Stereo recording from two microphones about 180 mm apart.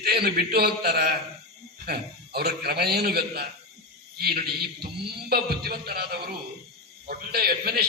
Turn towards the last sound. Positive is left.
turn(degrees=-60)  # may be behind; listen again after turning